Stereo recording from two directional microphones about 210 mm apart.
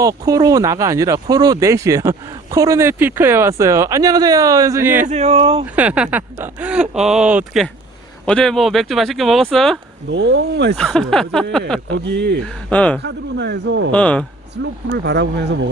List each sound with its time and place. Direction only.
0.0 s speech: 15° right (ahead or behind)
5.0 s speech: 30° right (ahead or behind)
5.6 s speech: 5° right (ahead or behind)
10.1 s speech: 60° right (ahead or behind)
10.8 s speech: 5° left (ahead or behind)
12.0 s speech: 55° right (ahead or behind)
12.7 s speech: 5° left (ahead or behind)
13.0 s speech: 55° right (ahead or behind)
13.9 s speech: 5° left (ahead or behind)
14.5 s speech: 55° right (ahead or behind)